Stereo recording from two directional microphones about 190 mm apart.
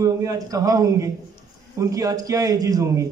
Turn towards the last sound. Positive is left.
turn(degrees=-15)  # may be behind; listen again after turning